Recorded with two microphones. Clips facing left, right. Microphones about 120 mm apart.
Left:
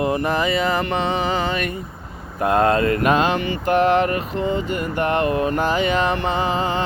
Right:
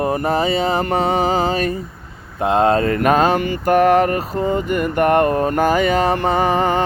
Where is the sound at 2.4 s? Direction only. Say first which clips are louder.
Right 2 dB; 25° right (ahead or behind); by 6.8 s 50° right (ahead or behind).